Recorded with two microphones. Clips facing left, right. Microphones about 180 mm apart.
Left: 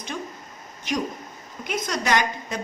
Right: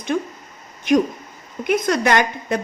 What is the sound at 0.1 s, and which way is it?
Speech, 55° right (ahead or behind).